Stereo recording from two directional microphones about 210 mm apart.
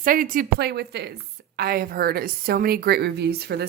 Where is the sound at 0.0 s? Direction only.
40° right (ahead or behind).